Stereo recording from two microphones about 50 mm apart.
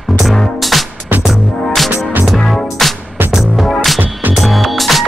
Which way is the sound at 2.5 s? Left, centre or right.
Centre.